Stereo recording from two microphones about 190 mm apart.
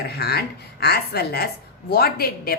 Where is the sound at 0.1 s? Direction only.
55° left (ahead or behind).